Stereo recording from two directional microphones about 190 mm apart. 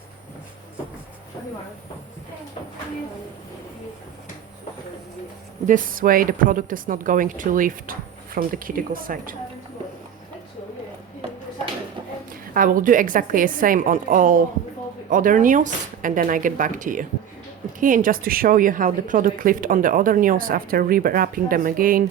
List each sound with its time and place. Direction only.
5.6 s a woman's voice: 45° right (ahead or behind)
12.3 s a woman's voice: 45° right (ahead or behind)